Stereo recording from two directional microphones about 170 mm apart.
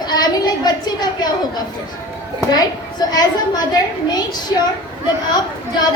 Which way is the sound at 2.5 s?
25° left (ahead or behind).